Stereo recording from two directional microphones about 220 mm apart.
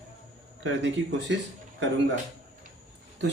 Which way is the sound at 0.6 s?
55° right (ahead or behind).